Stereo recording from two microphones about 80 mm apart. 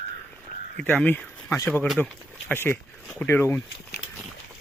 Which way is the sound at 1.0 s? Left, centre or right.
Left.